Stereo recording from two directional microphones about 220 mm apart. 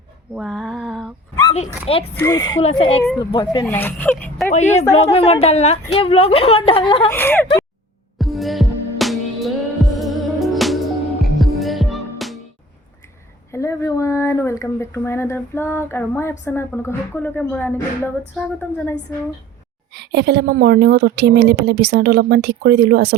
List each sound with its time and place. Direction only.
0.3 s female singing: centre (ahead or behind)
2.1 s a woman's voice: 15° left (ahead or behind)
3.0 s a woman's voice: 15° left (ahead or behind)
4.4 s a woman's voice: 30° left (ahead or behind)
7.1 s a woman's voice: 10° left (ahead or behind)
8.2 s music: centre (ahead or behind)
13.5 s a sound: 15° left (ahead or behind)
16.5 s a woman's voice: 10° left (ahead or behind)
19.9 s a woman's voice: 50° right (ahead or behind)